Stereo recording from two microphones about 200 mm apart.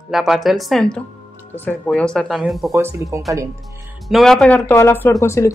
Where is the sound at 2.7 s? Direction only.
15° right (ahead or behind).